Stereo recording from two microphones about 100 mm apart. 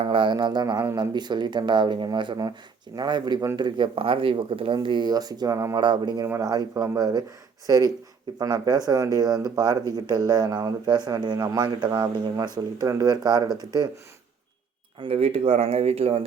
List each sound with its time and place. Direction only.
0.0 s a man's voice: 60° right (ahead or behind); by 3.7 s 40° right (ahead or behind)
3.8 s a man's voice: 60° right (ahead or behind); by 5.8 s 35° right (ahead or behind)
5.8 s a man's voice: 50° right (ahead or behind)
15.0 s speech: 80° right